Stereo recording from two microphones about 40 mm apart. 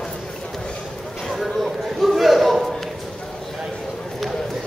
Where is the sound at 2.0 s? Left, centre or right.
Centre.